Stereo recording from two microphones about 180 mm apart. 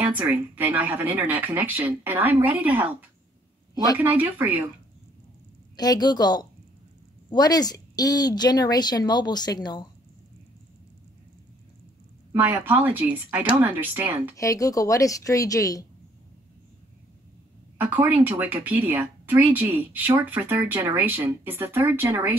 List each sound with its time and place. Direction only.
0.0 s speech: 10° right (ahead or behind)
3.7 s speech: 20° left (ahead or behind)
4.0 s speech: 10° right (ahead or behind)
5.8 s speech: 20° left (ahead or behind)
12.3 s speech: 10° right (ahead or behind)
14.3 s speech: 20° left (ahead or behind)
17.7 s speech: 10° right (ahead or behind)